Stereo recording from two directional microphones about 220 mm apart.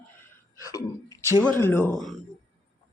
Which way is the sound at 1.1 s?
15° left (ahead or behind).